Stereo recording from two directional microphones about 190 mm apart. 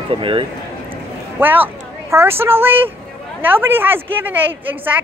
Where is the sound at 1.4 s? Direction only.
10° right (ahead or behind).